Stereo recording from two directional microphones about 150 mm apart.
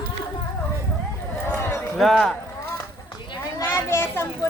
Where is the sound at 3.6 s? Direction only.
15° left (ahead or behind).